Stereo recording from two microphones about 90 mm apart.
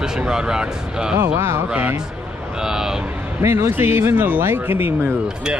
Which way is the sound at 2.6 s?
5° right (ahead or behind).